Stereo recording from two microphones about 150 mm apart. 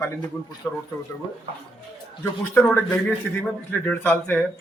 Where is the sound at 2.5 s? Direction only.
10° left (ahead or behind).